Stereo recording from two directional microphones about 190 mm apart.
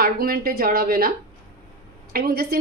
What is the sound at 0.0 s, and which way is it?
A woman's voice, 50° right (ahead or behind).